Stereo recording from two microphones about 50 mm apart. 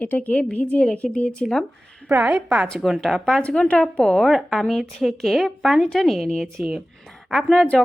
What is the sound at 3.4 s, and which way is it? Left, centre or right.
A woman's voice, left.